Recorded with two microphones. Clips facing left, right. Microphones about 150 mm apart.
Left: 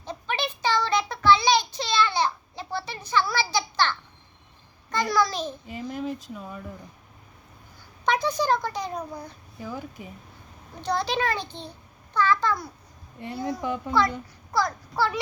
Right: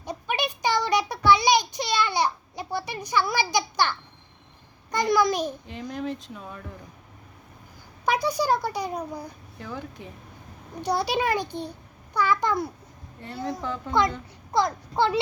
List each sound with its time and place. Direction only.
0.0 s a sound: 15° right (ahead or behind)
5.9 s speech: 5° left (ahead or behind)
8.0 s a child's voice: 10° right (ahead or behind)
9.6 s speech: 10° left (ahead or behind)
10.8 s a child's voice: 10° right (ahead or behind)
13.2 s speech: 15° left (ahead or behind)
14.5 s a child's voice: 20° right (ahead or behind)